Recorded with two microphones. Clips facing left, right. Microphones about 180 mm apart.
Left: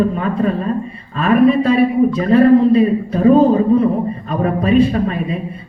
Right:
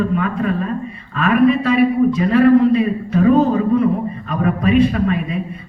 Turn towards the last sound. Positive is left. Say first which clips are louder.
# even
turn(degrees=30)  # may be behind; listen again after turning